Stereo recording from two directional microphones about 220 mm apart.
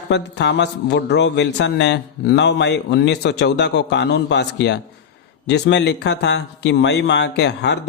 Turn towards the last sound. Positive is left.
turn(degrees=50)  # may be behind; listen again after turning